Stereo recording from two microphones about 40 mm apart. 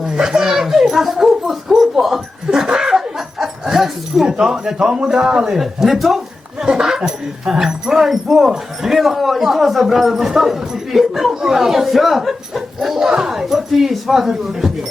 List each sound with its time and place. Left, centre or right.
0.0 s a sound: centre
5.0 s speech: centre
5.5 s speech: centre
6.7 s speech: centre